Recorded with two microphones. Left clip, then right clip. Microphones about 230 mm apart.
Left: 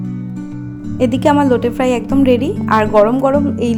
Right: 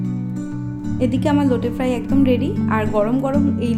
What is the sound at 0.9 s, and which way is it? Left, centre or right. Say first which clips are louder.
Speech: left 7 dB; centre.